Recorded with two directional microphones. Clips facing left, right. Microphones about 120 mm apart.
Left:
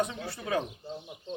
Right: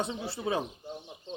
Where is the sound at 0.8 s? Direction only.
15° right (ahead or behind).